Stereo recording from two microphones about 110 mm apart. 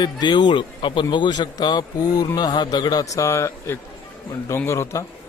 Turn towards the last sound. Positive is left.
turn(degrees=25)  # may be behind; listen again after turning